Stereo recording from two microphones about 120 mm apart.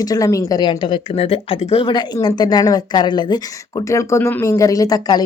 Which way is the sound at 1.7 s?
40° left (ahead or behind).